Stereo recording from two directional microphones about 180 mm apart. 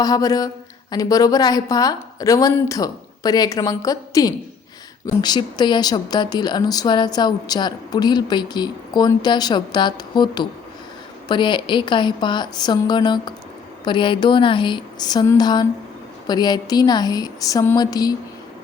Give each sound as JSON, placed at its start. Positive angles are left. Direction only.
{"t": 0.0, "sound": "speech", "side_deg": 20}